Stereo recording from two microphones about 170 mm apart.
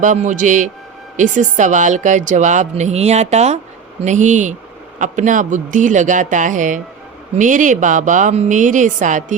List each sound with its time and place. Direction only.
0.0 s speech: 50° right (ahead or behind)